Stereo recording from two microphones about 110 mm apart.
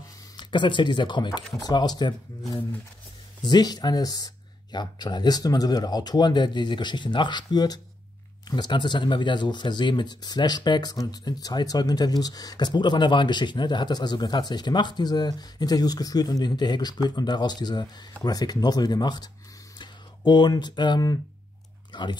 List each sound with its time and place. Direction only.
0.4 s speech: 45° left (ahead or behind)
3.4 s speech: 40° left (ahead or behind)